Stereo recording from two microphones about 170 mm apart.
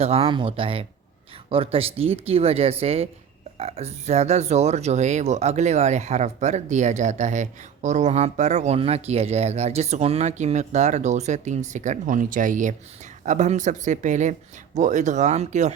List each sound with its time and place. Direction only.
0.0 s speech: 35° right (ahead or behind)